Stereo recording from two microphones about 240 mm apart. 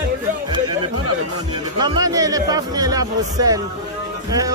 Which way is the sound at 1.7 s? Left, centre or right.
Centre.